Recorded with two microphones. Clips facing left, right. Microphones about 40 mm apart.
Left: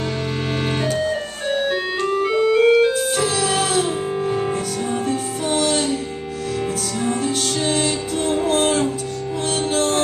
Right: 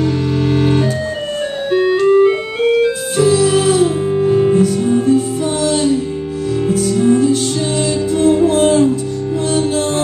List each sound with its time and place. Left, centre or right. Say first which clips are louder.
1.7 s organ: right 9 dB; centre
2.0 s organ: right 3 dB; right
3.3 s music: right 9 dB; left
3.8 s music: right 8 dB; centre
7.0 s music: right 10 dB; left